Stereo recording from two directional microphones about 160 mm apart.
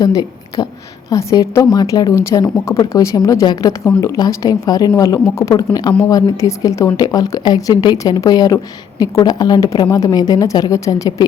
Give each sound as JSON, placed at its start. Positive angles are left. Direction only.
{"t": 0.0, "sound": "a woman's voice", "side_deg": 25}